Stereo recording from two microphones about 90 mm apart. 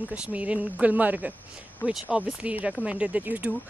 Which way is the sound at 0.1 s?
15° right (ahead or behind).